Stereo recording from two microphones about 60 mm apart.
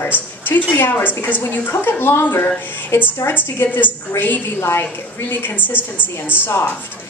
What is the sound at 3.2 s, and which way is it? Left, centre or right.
Speech, left.